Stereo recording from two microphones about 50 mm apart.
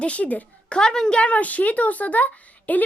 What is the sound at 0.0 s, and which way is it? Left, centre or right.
Speech, left.